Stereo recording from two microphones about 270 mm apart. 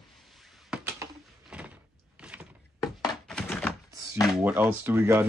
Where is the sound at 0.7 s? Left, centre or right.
Centre.